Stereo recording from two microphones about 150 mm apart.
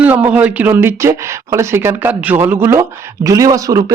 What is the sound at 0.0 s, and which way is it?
Speech, 10° right (ahead or behind).